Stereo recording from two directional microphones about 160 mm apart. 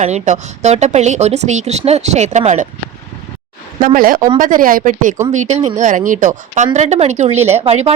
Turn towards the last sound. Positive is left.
turn(degrees=-40)  # may be behind; listen again after turning